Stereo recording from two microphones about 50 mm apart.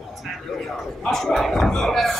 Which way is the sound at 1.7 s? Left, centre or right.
Centre.